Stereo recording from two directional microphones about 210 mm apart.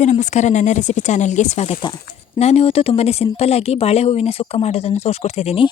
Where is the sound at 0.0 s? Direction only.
35° left (ahead or behind).